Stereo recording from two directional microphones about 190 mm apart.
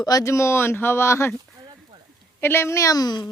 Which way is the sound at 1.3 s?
20° right (ahead or behind).